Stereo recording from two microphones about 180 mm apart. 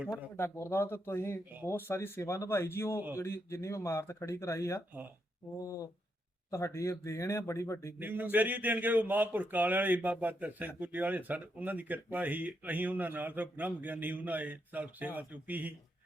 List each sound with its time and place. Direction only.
0.3 s speech: 15° left (ahead or behind)
7.9 s speech: 10° right (ahead or behind)